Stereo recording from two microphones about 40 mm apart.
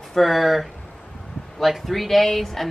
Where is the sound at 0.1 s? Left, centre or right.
Centre.